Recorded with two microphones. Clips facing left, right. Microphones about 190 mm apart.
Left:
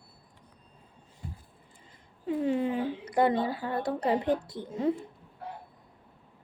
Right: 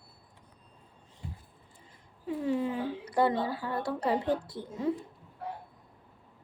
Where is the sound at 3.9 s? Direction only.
15° left (ahead or behind).